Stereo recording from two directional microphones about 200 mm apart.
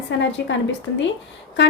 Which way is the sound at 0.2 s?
60° left (ahead or behind).